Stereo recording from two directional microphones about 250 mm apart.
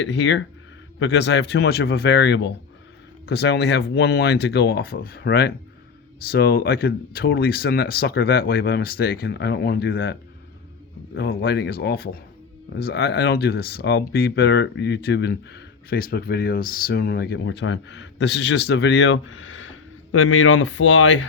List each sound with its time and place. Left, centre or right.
0.0 s speech: left